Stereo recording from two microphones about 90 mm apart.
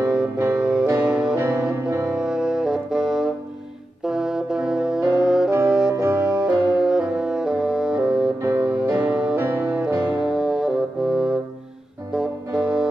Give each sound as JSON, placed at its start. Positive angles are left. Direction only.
{"t": 0.0, "sound": "music", "side_deg": -10}
{"t": 1.4, "sound": "music", "side_deg": -25}
{"t": 2.0, "sound": "music", "side_deg": -10}
{"t": 4.0, "sound": "brass instrument", "side_deg": -5}
{"t": 5.7, "sound": "music", "side_deg": -10}